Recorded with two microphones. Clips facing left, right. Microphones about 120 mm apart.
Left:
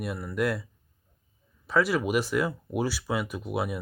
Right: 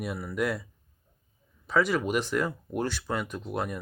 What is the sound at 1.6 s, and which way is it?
Speech, centre (ahead or behind).